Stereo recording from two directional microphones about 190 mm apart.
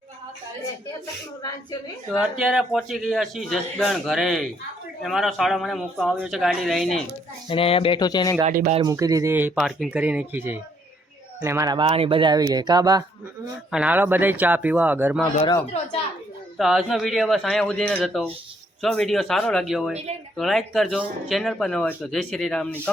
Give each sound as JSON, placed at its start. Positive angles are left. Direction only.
{"t": 2.0, "sound": "speech", "side_deg": 0}
{"t": 7.4, "sound": "speech", "side_deg": 30}
{"t": 8.4, "sound": "speech", "side_deg": -45}
{"t": 8.7, "sound": "a man's voice", "side_deg": -20}
{"t": 9.6, "sound": "a man's voice", "side_deg": 0}
{"t": 13.7, "sound": "a man's voice", "side_deg": -5}
{"t": 15.6, "sound": "a woman's voice", "side_deg": 30}
{"t": 16.6, "sound": "speech", "side_deg": 0}